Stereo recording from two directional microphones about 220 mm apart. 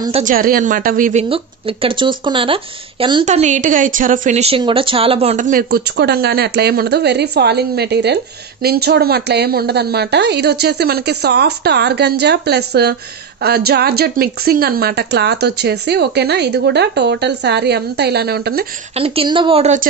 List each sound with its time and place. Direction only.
0.2 s speech: 40° right (ahead or behind)
1.3 s speech: 25° right (ahead or behind); by 18.7 s 45° right (ahead or behind)
18.9 s speech: 25° right (ahead or behind)